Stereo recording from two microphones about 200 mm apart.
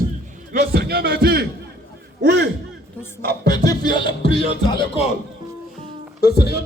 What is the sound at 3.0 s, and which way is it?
Music, 15° left (ahead or behind).